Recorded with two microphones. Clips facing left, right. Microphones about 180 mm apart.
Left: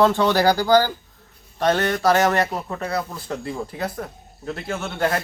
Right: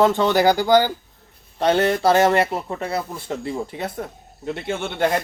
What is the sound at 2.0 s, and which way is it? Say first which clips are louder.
Speech: right 2 dB; 30° right (ahead or behind).